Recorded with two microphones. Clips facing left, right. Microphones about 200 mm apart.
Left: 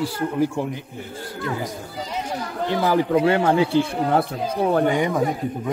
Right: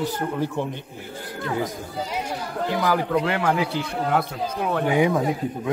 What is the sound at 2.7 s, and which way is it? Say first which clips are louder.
Speech: left 4 dB; 30° left (ahead or behind).